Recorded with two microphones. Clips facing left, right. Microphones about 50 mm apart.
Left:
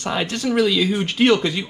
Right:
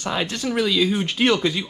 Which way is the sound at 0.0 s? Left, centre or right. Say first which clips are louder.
Left 2 dB; left.